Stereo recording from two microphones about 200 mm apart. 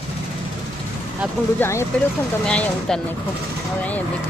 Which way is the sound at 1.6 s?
15° left (ahead or behind).